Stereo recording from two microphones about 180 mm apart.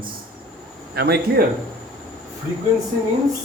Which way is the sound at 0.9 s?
60° right (ahead or behind).